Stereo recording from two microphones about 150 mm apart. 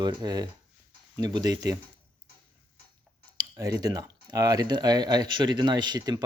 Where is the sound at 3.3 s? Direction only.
25° right (ahead or behind).